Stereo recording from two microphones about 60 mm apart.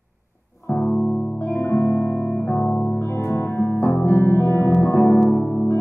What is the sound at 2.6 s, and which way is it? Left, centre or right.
Music, centre.